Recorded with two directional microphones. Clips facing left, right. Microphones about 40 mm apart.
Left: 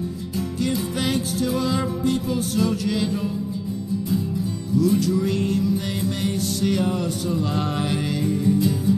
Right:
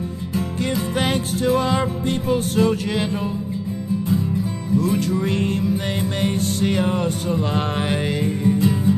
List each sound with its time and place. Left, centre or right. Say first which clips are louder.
0.9 s music: right 2 dB; right
4.7 s music: left 1 dB; right